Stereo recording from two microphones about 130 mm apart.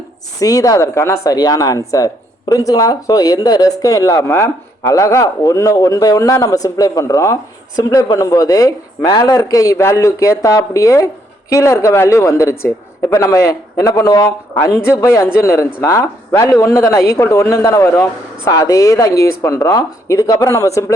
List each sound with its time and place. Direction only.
0.3 s speech: 25° left (ahead or behind)